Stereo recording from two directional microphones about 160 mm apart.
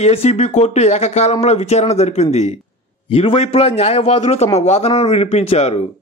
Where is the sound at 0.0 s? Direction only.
40° left (ahead or behind).